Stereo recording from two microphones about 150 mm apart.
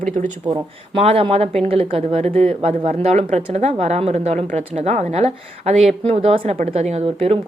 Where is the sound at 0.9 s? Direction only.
40° right (ahead or behind).